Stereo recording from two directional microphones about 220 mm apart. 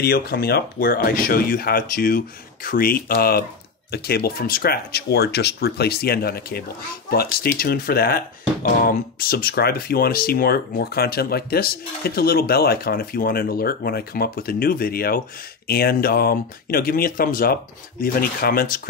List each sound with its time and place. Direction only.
0.0 s speech: 45° left (ahead or behind)